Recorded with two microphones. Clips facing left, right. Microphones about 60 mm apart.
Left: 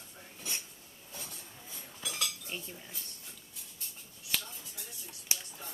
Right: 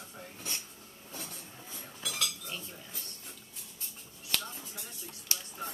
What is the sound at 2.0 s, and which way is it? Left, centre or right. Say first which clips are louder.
Cutlery: right 1 dB; left.